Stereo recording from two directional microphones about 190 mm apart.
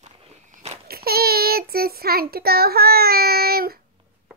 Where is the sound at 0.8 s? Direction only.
55° right (ahead or behind).